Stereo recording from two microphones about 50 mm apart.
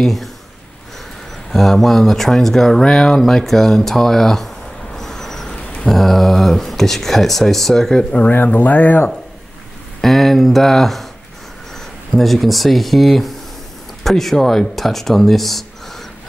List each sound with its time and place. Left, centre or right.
0.0 s speech: centre
1.5 s speech: centre
4.9 s vehicle: centre
5.9 s speech: centre
8.3 s speech: left
10.0 s speech: centre
12.1 s speech: centre